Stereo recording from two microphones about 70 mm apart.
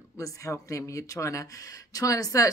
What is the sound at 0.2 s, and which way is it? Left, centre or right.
Speech, left.